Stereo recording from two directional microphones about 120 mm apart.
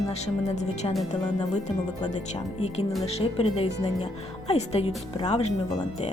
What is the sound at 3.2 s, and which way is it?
Speech, 60° left (ahead or behind).